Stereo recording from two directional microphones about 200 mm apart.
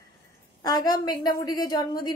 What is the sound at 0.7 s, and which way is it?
A woman's voice, 20° left (ahead or behind).